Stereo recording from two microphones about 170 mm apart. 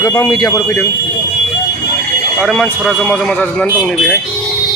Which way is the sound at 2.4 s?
Centre (ahead or behind).